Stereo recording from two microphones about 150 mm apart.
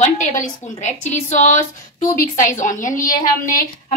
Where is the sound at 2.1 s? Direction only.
65° left (ahead or behind).